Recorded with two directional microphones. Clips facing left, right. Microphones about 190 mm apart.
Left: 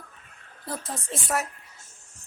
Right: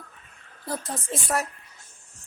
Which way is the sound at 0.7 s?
Centre (ahead or behind).